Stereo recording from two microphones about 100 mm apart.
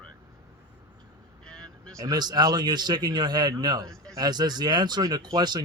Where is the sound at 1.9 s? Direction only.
40° right (ahead or behind).